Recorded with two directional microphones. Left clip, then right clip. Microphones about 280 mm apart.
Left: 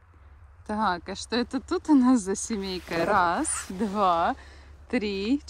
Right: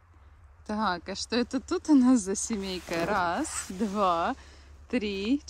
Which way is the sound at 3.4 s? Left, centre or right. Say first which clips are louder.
Left 3 dB; right.